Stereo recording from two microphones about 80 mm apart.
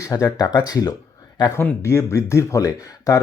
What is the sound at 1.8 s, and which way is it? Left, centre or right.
Speech, left.